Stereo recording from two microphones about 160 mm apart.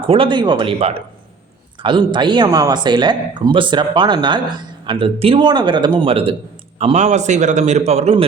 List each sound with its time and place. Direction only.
0.0 s a man's voice: 35° right (ahead or behind)